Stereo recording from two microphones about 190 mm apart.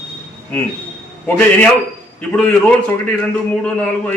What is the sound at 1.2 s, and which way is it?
Speech, 5° left (ahead or behind).